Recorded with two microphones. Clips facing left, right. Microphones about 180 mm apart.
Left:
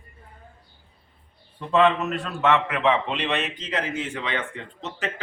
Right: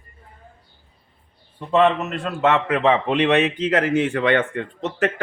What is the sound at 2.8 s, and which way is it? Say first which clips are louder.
Speech: right 4 dB; 45° right (ahead or behind).